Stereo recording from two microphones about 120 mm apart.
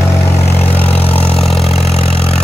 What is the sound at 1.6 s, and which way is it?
Vehicle, 60° left (ahead or behind).